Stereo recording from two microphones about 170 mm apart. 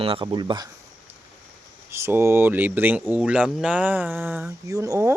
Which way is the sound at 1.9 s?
15° right (ahead or behind).